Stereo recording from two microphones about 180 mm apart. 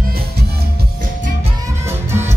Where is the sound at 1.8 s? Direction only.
15° right (ahead or behind).